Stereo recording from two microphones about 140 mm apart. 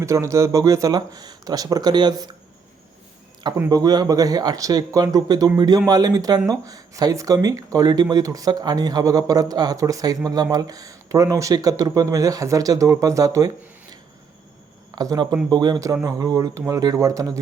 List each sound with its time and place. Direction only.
0.0 s a man's voice: 20° right (ahead or behind)
3.7 s a man's voice: 25° right (ahead or behind)
14.9 s a man's voice: 30° right (ahead or behind)